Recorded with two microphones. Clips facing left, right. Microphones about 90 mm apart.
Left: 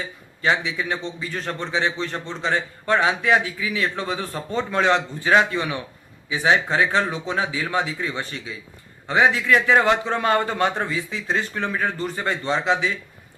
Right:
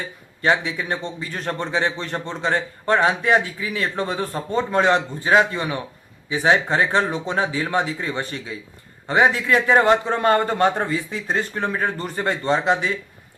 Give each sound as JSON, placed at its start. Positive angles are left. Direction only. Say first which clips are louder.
{"t": 0.4, "sound": "a man's voice", "louder": "right 2 dB", "side_deg": -50}